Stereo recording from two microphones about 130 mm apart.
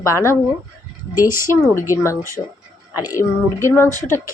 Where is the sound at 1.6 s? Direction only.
20° left (ahead or behind).